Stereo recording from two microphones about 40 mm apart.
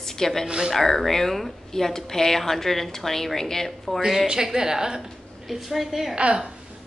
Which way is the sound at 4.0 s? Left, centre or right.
Centre.